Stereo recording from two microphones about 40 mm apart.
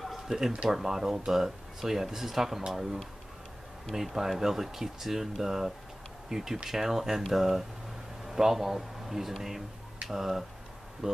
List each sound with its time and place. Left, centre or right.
0.3 s speech: centre